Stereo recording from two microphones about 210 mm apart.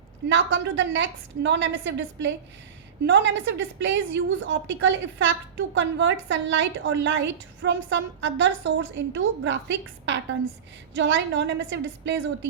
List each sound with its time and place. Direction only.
0.3 s a woman's voice: 60° right (ahead or behind)